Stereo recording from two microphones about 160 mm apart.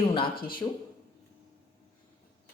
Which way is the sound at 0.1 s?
30° left (ahead or behind).